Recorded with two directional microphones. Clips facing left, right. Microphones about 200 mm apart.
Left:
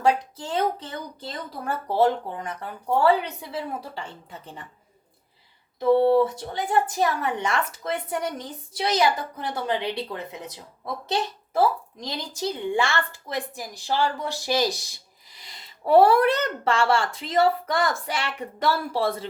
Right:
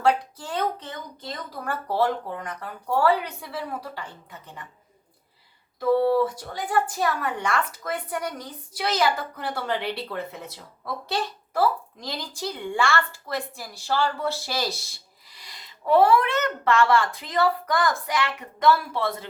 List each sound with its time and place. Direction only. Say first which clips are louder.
0.0 s a woman's voice: even; 25° left (ahead or behind)
5.8 s a woman's voice: left 2 dB; 25° left (ahead or behind)